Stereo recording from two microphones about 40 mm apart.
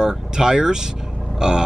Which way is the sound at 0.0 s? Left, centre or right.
Centre.